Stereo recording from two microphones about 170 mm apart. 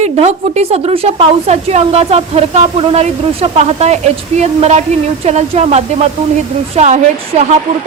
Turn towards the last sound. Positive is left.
turn(degrees=-40)  # may be behind; listen again after turning